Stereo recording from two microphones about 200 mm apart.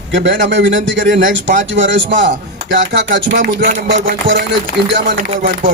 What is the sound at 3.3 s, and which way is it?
Speech, 40° right (ahead or behind).